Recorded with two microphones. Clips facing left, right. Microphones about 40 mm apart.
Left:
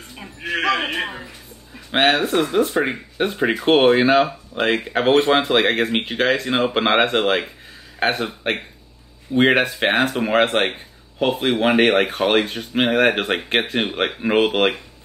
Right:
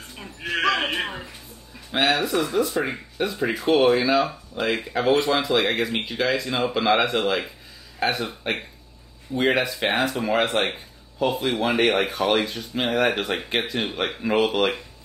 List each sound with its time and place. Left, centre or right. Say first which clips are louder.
0.1 s a sound: left 3 dB; centre
1.9 s speech: left 4 dB; left
9.3 s speech: left 5 dB; left